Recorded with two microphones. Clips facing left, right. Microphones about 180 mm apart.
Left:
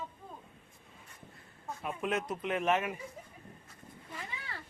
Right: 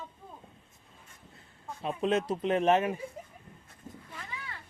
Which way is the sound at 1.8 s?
25° right (ahead or behind).